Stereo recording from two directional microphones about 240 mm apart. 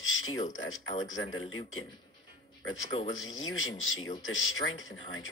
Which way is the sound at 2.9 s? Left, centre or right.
Left.